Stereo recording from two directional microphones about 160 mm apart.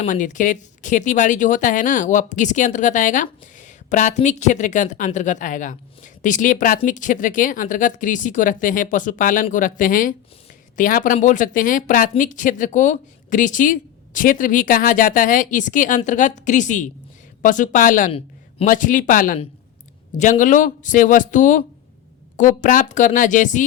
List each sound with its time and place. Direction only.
0.0 s speech: 50° left (ahead or behind)